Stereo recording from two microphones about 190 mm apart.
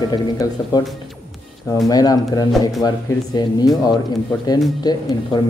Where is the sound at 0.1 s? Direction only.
20° left (ahead or behind).